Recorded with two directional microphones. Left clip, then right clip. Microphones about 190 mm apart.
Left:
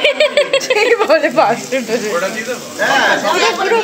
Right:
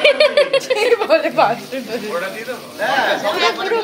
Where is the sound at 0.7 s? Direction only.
35° left (ahead or behind).